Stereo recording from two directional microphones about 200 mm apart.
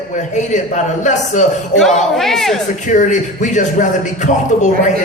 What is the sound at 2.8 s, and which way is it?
Speech, 40° left (ahead or behind).